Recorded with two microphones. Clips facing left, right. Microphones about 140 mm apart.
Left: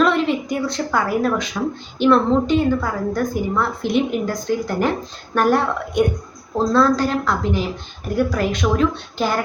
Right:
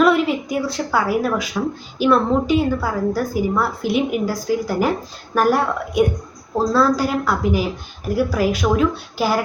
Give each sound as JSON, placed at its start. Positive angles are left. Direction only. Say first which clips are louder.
{"t": 0.0, "sound": "a woman's voice", "louder": "right 2 dB", "side_deg": -5}